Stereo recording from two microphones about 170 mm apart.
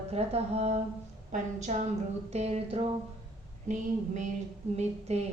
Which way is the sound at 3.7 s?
45° right (ahead or behind).